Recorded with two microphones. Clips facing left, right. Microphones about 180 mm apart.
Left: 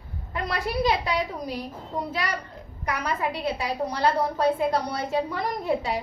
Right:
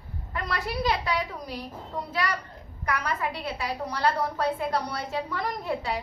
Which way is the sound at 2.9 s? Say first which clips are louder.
Left 2 dB; 20° left (ahead or behind).